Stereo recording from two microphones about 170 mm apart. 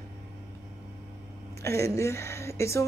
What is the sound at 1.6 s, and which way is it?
Speech, 15° left (ahead or behind).